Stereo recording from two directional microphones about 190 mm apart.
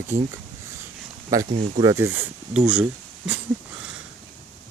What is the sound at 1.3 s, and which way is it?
Speech, 20° right (ahead or behind).